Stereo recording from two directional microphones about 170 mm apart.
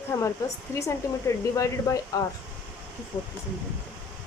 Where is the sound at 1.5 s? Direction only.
20° left (ahead or behind).